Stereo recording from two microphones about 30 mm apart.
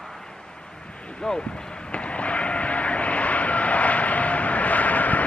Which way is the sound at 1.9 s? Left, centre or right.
Left.